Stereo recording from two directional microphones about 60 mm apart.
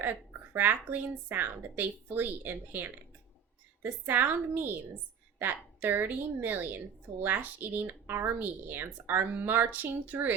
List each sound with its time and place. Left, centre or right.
0.0 s a woman's voice: right